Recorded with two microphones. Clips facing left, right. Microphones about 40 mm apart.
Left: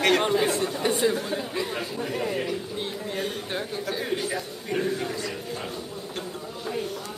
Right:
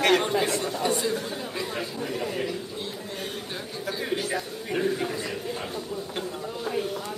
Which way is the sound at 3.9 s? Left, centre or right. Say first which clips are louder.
Right 1 dB; centre.